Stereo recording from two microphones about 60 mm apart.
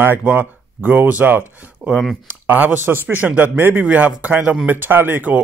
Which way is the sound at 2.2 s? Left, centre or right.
Right.